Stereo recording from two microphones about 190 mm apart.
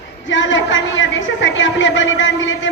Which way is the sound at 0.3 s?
80° left.